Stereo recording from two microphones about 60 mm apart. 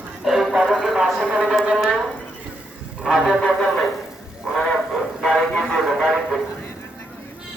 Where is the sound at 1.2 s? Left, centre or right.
Centre.